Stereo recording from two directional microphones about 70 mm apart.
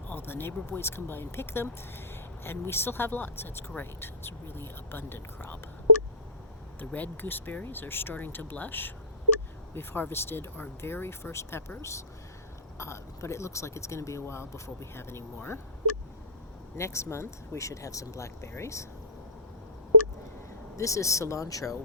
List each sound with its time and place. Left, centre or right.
0.1 s speech: left
6.7 s speech: left
16.7 s speech: left
20.7 s speech: left